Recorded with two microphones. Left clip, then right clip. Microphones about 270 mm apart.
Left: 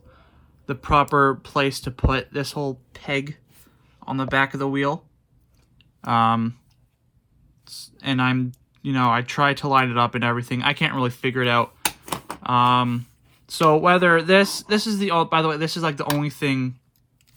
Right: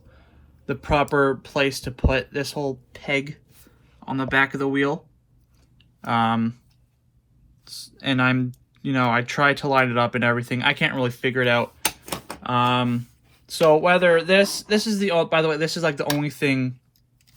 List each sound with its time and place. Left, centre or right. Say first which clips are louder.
0.1 s speech: left 2 dB; centre
7.6 s speech: right 1 dB; centre